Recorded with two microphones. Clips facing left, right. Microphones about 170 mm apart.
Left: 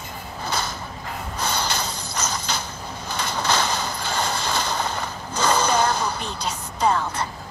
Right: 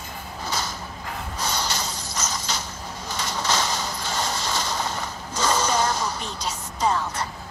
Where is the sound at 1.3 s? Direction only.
55° left (ahead or behind).